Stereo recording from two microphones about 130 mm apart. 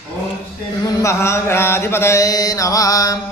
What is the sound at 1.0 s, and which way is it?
Mantra, 20° left (ahead or behind).